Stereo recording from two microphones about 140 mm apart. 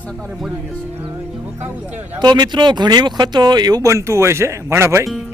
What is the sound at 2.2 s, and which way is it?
Speech, 30° right (ahead or behind).